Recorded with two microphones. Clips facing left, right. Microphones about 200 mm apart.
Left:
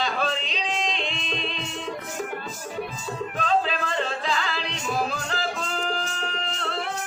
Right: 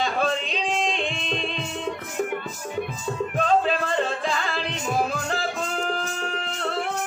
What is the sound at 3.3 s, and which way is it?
Music, 50° right (ahead or behind).